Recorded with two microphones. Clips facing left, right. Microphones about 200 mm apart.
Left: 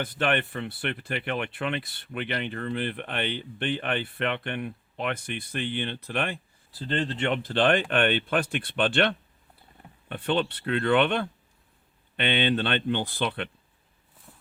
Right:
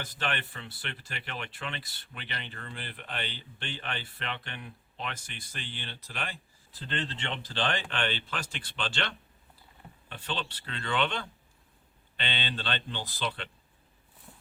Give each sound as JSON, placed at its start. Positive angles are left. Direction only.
{"t": 0.0, "sound": "speech", "side_deg": 55}
{"t": 6.8, "sound": "speech", "side_deg": 45}